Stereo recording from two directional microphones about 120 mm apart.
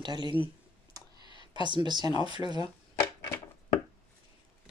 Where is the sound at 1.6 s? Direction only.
40° right (ahead or behind).